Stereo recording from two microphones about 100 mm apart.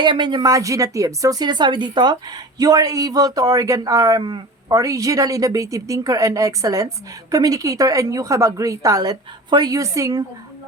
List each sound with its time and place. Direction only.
0.0 s speech: 50° right (ahead or behind)
4.2 s a man's voice: 50° right (ahead or behind)
4.7 s speech: 35° right (ahead or behind)